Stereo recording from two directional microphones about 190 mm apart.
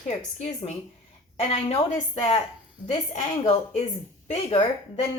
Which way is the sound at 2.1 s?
30° left (ahead or behind).